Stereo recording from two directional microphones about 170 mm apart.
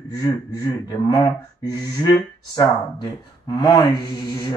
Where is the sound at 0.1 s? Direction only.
20° left (ahead or behind).